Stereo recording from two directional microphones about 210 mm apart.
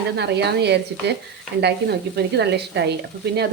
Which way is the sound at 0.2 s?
50° right (ahead or behind).